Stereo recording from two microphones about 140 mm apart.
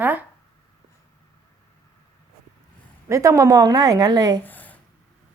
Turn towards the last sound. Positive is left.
turn(degrees=10)  # may be behind; listen again after turning